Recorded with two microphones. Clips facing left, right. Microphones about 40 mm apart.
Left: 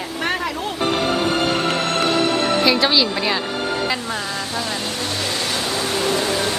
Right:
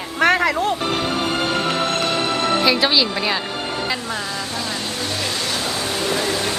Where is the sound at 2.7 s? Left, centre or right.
Centre.